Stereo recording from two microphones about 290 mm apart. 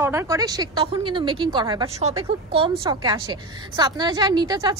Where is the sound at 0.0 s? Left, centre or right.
Centre.